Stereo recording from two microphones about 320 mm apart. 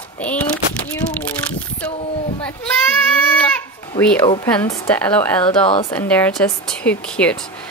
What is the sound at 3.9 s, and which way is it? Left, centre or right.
Speech, centre.